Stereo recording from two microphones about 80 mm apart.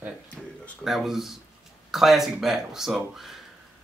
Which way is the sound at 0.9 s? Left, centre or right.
Centre.